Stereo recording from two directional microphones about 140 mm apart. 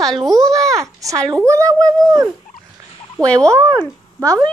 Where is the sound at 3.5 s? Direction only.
20° right (ahead or behind).